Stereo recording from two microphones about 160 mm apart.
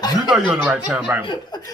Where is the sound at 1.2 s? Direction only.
30° left (ahead or behind).